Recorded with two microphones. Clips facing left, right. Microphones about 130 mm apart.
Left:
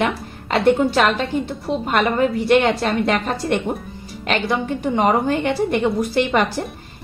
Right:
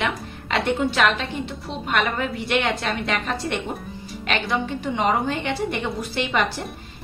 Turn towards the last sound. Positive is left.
turn(degrees=45)  # may be behind; listen again after turning